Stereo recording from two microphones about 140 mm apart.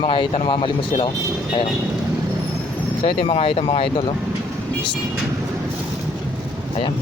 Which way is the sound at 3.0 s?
40° left (ahead or behind).